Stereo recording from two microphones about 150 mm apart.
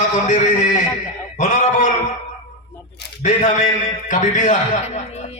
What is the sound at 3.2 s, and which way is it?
A man's voice, 55° left (ahead or behind).